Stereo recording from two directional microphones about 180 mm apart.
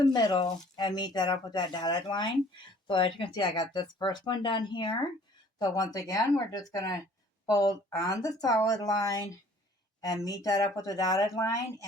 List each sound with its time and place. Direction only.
0.0 s speech: 25° left (ahead or behind)